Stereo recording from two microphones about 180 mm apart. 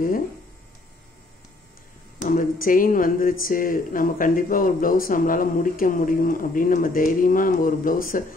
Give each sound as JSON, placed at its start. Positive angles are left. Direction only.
{"t": 2.2, "sound": "speech", "side_deg": 50}